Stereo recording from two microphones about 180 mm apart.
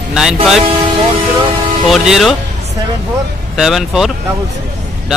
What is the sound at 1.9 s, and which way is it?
Speech, centre (ahead or behind).